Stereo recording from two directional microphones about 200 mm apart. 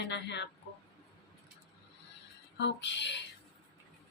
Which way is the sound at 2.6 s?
60° left (ahead or behind).